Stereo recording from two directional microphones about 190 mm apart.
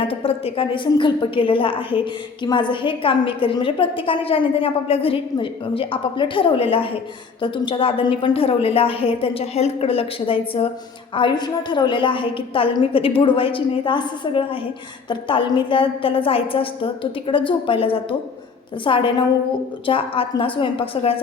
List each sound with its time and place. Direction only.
0.0 s a woman's voice: 30° left (ahead or behind)